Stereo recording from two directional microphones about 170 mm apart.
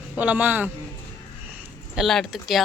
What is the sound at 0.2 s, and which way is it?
Speech, 10° right (ahead or behind).